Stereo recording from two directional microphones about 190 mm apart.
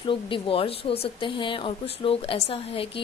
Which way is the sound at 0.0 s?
25° left (ahead or behind).